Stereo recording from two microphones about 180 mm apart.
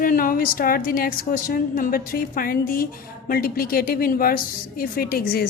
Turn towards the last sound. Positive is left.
turn(degrees=55)  # may be behind; listen again after turning